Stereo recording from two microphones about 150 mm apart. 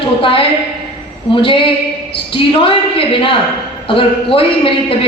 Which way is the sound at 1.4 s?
35° left (ahead or behind).